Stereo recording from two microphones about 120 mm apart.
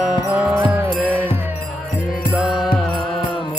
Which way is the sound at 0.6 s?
15° right (ahead or behind).